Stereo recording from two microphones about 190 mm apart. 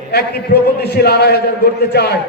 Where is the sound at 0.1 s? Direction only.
55° left (ahead or behind).